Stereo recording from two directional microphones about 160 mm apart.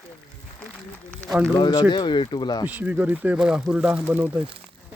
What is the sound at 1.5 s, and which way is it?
Speech, 30° left (ahead or behind).